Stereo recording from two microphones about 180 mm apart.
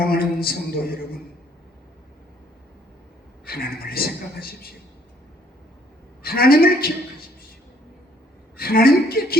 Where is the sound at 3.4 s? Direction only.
55° left (ahead or behind).